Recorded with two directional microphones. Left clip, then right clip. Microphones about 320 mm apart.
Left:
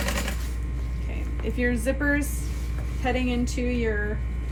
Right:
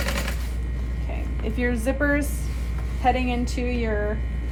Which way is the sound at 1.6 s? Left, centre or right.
Centre.